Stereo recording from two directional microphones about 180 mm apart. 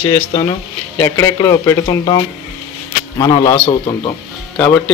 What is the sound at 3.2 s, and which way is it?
Speech, 20° left (ahead or behind).